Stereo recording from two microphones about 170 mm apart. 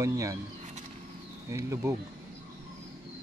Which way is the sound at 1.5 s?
15° right (ahead or behind).